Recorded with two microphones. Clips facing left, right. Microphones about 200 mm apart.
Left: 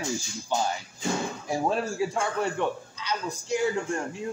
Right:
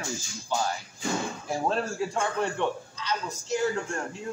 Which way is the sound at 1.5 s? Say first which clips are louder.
Left 1 dB; 10° left (ahead or behind).